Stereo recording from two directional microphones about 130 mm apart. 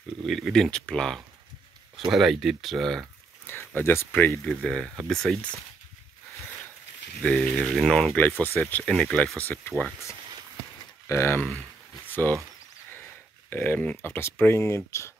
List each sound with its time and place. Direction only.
0.3 s speech: 5° left (ahead or behind)
3.4 s speech: 15° left (ahead or behind)
4.5 s speech: 5° left (ahead or behind)
7.2 s speech: 10° left (ahead or behind)
9.8 s speech: centre (ahead or behind)
11.1 s speech: 20° left (ahead or behind)
13.5 s speech: 15° left (ahead or behind)